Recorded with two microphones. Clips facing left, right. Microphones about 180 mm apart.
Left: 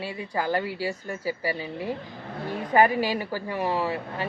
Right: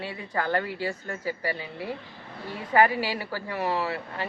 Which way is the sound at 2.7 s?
15° left (ahead or behind).